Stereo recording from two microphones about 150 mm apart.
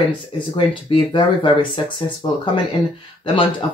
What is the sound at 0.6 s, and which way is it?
Speech, 35° left (ahead or behind).